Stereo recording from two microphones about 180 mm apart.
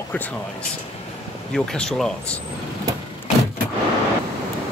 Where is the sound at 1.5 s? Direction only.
5° left (ahead or behind).